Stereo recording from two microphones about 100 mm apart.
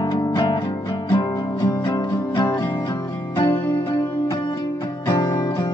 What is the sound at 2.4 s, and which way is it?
Music, 50° left (ahead or behind).